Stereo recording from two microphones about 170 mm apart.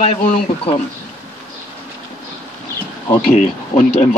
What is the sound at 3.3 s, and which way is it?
Speech, 45° left (ahead or behind).